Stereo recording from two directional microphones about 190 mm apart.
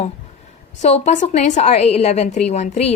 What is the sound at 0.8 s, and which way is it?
A woman's voice, 35° left (ahead or behind).